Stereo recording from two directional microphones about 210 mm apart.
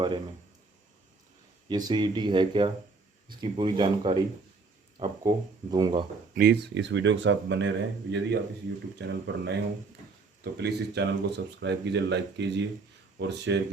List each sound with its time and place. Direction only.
1.6 s speech: 20° right (ahead or behind)
6.3 s speech: 50° right (ahead or behind)
10.6 s speech: 55° right (ahead or behind)